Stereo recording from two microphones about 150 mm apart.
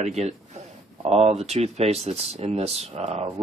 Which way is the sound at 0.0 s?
45° right (ahead or behind).